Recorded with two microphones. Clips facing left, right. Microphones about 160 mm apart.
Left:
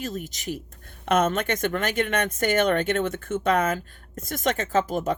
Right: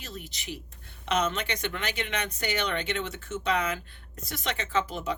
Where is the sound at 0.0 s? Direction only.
45° left (ahead or behind).